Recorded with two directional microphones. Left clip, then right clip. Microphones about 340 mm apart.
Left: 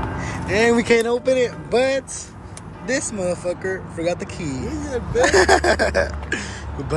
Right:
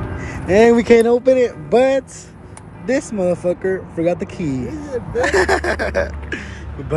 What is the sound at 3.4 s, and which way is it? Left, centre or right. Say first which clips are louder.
Speech: right 5 dB; centre.